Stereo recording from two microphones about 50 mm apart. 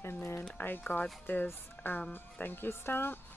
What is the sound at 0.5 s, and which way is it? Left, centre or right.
Speech, left.